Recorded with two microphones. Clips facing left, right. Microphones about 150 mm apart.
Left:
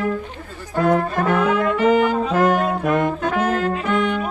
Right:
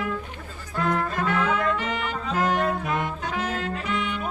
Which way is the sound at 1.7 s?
45° left (ahead or behind).